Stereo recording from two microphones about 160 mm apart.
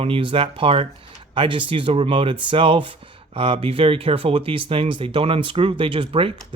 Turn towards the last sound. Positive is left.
turn(degrees=-35)  # may be behind; listen again after turning